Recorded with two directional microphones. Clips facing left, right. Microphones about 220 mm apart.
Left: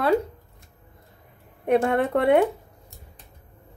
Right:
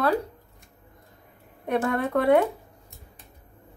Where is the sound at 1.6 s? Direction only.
30° left (ahead or behind).